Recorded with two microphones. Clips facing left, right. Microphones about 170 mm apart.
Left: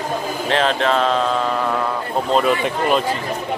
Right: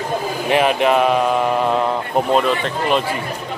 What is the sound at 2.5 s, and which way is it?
Speech, 10° left (ahead or behind).